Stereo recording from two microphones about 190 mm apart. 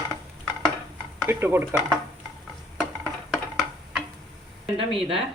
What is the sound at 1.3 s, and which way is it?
Speech, 10° right (ahead or behind).